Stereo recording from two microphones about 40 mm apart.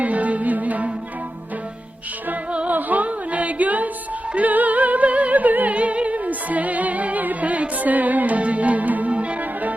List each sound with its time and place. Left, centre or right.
0.0 s music: right
2.6 s music: right
5.7 s music: right